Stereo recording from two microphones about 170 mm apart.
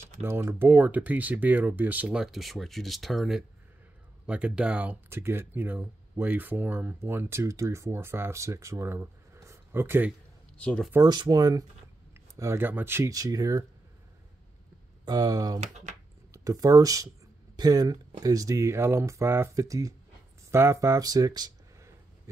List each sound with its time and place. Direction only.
0.2 s speech: 15° right (ahead or behind)
10.6 s speech: 5° left (ahead or behind)
11.0 s speech: 25° right (ahead or behind)
15.0 s speech: 25° right (ahead or behind)